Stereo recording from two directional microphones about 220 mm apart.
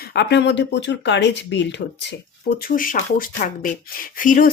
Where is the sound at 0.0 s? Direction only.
50° left (ahead or behind).